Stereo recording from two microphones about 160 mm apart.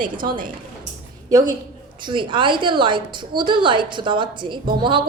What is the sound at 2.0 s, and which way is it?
A woman's voice, 30° right (ahead or behind).